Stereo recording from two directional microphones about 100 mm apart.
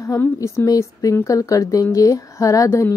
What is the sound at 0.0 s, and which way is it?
A woman's voice, 30° left (ahead or behind).